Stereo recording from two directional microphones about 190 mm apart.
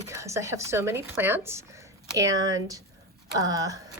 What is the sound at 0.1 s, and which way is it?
Speech, 15° right (ahead or behind).